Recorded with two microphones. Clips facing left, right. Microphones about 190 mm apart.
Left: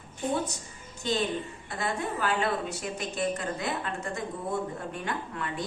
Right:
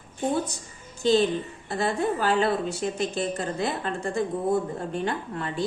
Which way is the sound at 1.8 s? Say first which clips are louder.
Right 6 dB; 30° right (ahead or behind).